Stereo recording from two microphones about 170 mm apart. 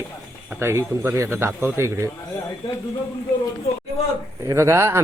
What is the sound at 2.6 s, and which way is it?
Speech, 25° left (ahead or behind).